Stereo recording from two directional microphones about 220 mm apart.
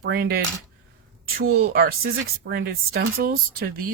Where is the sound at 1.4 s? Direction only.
45° right (ahead or behind).